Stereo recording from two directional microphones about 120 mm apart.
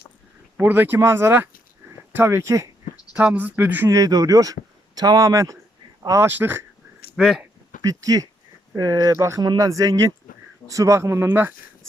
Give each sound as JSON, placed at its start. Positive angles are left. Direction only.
{"t": 0.5, "sound": "speech", "side_deg": -15}
{"t": 3.2, "sound": "speech", "side_deg": -15}
{"t": 3.8, "sound": "speech", "side_deg": -30}
{"t": 7.2, "sound": "speech", "side_deg": -5}
{"t": 7.8, "sound": "speech", "side_deg": -30}